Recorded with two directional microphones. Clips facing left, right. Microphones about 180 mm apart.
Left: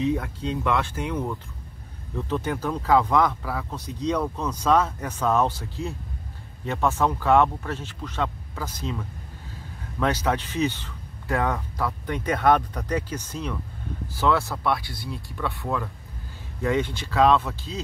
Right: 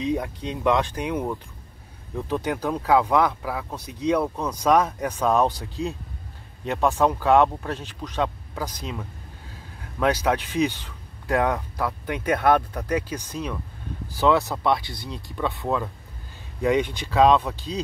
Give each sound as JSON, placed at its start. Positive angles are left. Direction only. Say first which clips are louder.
{"t": 0.0, "sound": "speech", "louder": "left 1 dB", "side_deg": -15}